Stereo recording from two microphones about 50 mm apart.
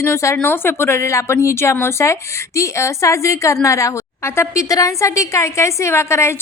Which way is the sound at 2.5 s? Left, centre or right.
Left.